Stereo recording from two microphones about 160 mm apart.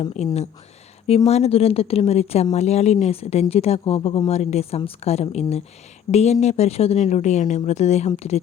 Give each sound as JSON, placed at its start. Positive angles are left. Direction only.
{"t": 0.2, "sound": "speech", "side_deg": 40}